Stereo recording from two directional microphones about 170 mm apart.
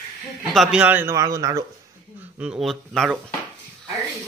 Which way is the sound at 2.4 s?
5° right (ahead or behind).